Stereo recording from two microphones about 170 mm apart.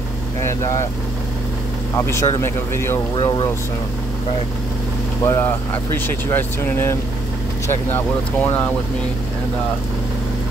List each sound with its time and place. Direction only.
0.4 s speech: 15° left (ahead or behind)
2.0 s speech: 15° left (ahead or behind)
5.2 s speech: 15° left (ahead or behind)
8.4 s speech: 10° left (ahead or behind)